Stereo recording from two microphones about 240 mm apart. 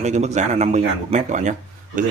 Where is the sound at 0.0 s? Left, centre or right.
Right.